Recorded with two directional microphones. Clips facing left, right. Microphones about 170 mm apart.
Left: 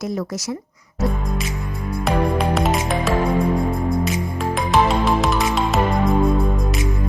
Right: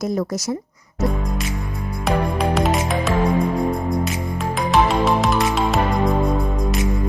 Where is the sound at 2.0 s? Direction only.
Centre (ahead or behind).